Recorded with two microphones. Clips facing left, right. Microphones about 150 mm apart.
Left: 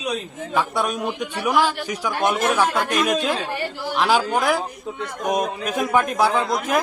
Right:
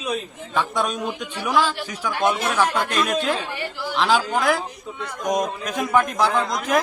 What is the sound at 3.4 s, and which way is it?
Speech, 45° left (ahead or behind).